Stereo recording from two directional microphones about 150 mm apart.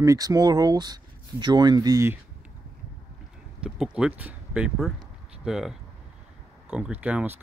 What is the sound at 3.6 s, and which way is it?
Speech, 5° right (ahead or behind).